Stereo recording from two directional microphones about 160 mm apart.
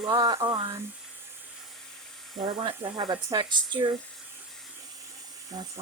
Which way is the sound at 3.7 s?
30° right (ahead or behind).